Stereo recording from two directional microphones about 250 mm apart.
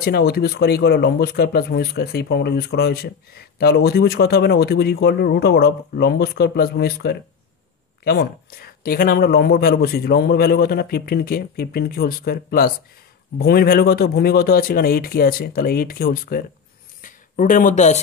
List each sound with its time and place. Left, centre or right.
0.0 s speech: left